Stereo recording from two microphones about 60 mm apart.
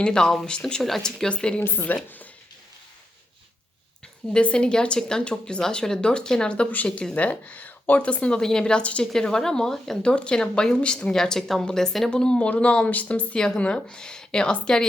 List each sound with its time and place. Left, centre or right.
0.0 s speech: centre
1.9 s speech: left
4.3 s speech: centre
9.1 s speech: centre
10.1 s speech: centre